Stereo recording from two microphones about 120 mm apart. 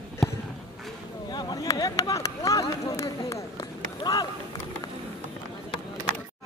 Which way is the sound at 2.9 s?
25° left (ahead or behind).